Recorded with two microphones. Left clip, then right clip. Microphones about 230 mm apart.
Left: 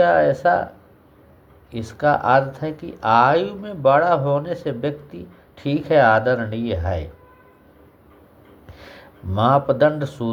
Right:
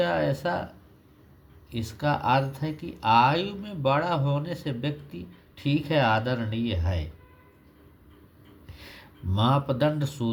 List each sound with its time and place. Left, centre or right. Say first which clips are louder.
0.0 s speech: left 10 dB; right
1.7 s speech: left 9 dB; right
8.8 s speech: left 4 dB; right